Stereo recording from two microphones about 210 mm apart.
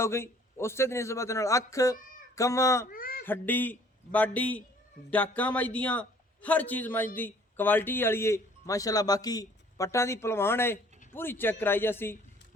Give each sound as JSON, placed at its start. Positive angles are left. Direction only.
{"t": 0.0, "sound": "speech", "side_deg": 10}
{"t": 2.9, "sound": "a sound", "side_deg": 40}
{"t": 3.2, "sound": "speech", "side_deg": 10}